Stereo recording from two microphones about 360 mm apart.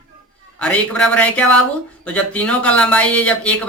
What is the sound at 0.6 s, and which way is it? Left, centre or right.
Speech, centre.